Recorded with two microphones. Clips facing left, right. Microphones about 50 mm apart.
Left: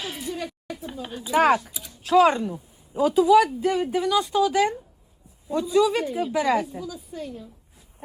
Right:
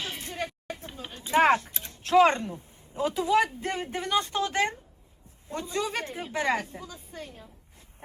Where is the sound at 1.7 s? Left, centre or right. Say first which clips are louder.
Even; right.